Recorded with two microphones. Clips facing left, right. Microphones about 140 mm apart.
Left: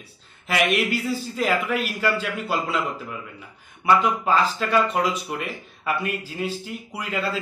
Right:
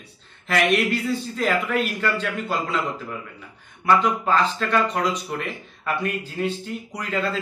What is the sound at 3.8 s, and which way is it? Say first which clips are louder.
Speech: even; 5° left (ahead or behind).